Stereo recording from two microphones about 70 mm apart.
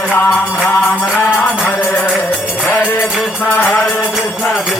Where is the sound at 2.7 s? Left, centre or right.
Left.